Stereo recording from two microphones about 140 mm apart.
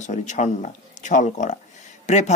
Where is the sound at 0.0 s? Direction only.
60° left (ahead or behind).